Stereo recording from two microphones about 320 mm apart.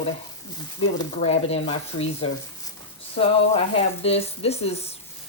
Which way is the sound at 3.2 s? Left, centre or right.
Centre.